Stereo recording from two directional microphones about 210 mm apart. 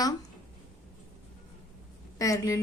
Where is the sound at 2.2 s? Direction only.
15° left (ahead or behind).